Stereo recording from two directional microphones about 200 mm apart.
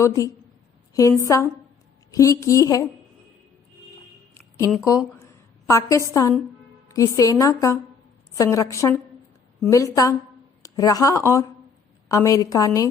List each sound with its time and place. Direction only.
0.0 s a woman's voice: 15° left (ahead or behind)
4.9 s a woman's voice: 15° left (ahead or behind)